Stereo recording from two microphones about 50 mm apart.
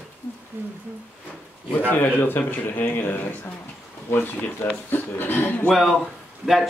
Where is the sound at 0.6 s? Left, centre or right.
Right.